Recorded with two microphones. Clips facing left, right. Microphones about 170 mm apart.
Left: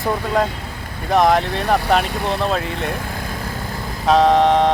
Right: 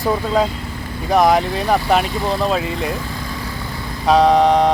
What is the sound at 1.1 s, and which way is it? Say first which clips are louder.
Speech: right 1 dB; centre (ahead or behind).